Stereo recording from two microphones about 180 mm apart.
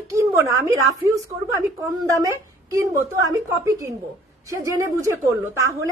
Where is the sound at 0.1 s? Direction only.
15° right (ahead or behind).